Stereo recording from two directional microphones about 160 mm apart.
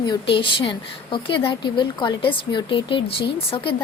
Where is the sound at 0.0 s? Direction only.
30° left (ahead or behind).